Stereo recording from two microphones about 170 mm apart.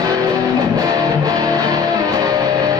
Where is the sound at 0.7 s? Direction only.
20° right (ahead or behind).